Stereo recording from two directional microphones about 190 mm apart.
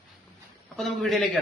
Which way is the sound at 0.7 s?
Centre (ahead or behind).